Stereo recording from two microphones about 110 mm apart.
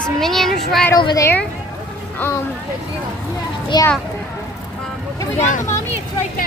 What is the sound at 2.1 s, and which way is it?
Speech, 20° left (ahead or behind).